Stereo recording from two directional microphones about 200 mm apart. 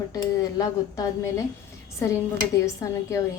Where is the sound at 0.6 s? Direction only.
15° left (ahead or behind).